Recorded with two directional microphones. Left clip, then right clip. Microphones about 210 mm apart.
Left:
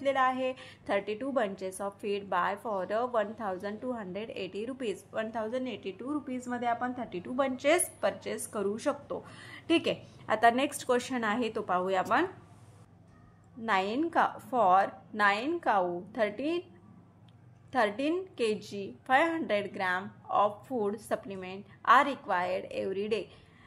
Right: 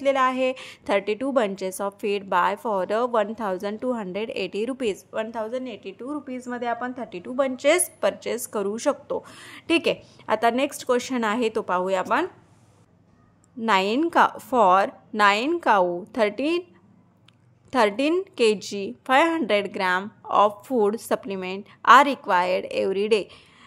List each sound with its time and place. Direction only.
0.0 s a woman's voice: 40° right (ahead or behind)
13.6 s a woman's voice: 40° right (ahead or behind)
17.6 s a woman's voice: 40° right (ahead or behind)